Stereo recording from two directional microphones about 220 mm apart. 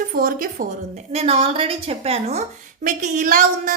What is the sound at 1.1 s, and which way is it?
A woman's voice, 30° right (ahead or behind).